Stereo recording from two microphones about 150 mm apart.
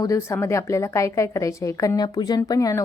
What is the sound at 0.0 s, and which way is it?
A woman's voice, 20° left (ahead or behind).